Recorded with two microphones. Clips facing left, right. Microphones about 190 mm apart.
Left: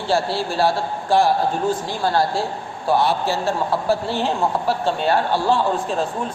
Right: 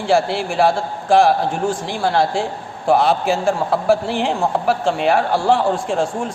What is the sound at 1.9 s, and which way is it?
Speech, 80° right.